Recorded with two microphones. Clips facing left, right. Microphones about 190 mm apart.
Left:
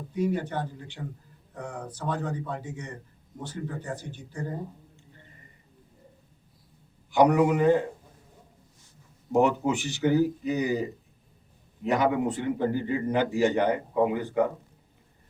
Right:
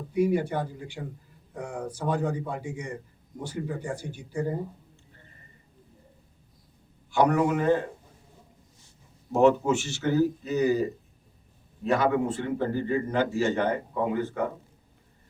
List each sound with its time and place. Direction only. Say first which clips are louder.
0.1 s a man's voice: right 4 dB; 10° right (ahead or behind)
7.1 s a man's voice: left 2 dB; 15° left (ahead or behind)
9.3 s a man's voice: right 2 dB; 15° left (ahead or behind)
11.9 s a man's voice: even; 15° left (ahead or behind)